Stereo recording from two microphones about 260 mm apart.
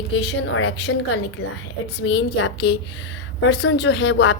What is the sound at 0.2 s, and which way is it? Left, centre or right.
A woman's voice, left.